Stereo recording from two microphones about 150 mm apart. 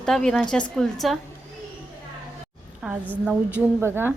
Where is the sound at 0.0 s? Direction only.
5° left (ahead or behind).